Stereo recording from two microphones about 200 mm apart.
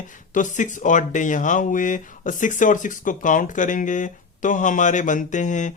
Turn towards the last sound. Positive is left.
turn(degrees=40)  # may be behind; listen again after turning